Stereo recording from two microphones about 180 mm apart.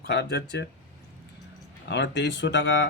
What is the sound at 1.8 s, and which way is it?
Speech, 75° left (ahead or behind).